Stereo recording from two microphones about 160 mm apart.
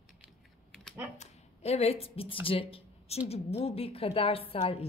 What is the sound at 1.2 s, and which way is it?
Speech, 40° left (ahead or behind).